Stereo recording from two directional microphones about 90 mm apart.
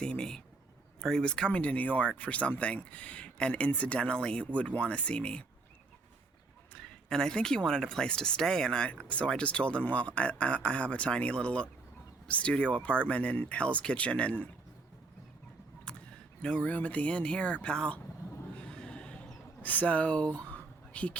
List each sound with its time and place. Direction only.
0.0 s speech: 10° left (ahead or behind)
7.1 s speech: 5° left (ahead or behind)
15.9 s a sound: 10° left (ahead or behind)
16.4 s speech: 10° left (ahead or behind)
18.5 s a sound: 10° left (ahead or behind)
19.6 s speech: 15° left (ahead or behind)